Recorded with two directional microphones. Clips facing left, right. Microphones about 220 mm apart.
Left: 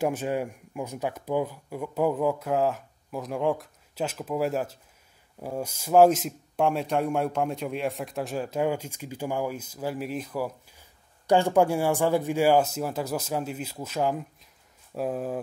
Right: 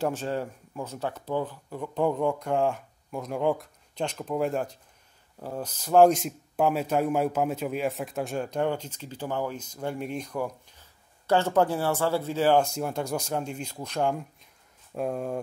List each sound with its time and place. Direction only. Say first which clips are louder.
0.0 s speech: left 2 dB; 10° left (ahead or behind)